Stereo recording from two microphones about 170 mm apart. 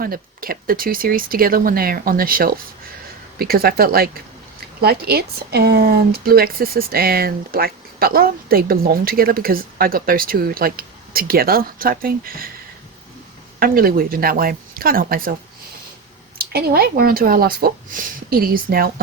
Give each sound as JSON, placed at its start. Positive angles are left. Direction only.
{"t": 0.0, "sound": "speech", "side_deg": -60}
{"t": 13.6, "sound": "speech", "side_deg": -60}
{"t": 16.4, "sound": "speech", "side_deg": -65}